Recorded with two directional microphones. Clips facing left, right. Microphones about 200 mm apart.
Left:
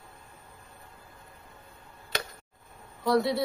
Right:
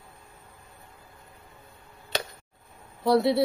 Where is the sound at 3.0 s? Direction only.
25° right (ahead or behind).